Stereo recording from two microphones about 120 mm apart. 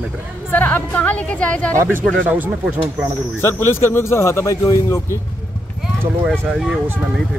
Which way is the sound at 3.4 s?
20° left (ahead or behind).